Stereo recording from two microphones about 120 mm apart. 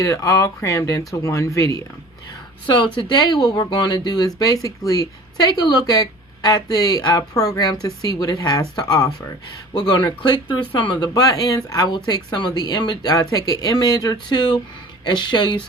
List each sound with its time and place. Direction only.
0.0 s speech: 25° left (ahead or behind)
2.7 s speech: 40° left (ahead or behind)